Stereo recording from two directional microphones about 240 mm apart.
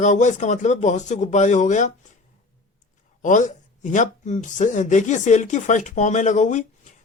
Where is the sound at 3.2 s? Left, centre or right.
Left.